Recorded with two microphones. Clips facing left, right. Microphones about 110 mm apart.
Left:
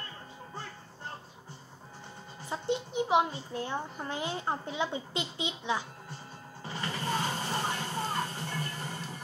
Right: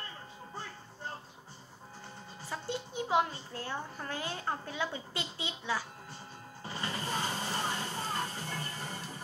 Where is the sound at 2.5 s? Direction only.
20° left (ahead or behind).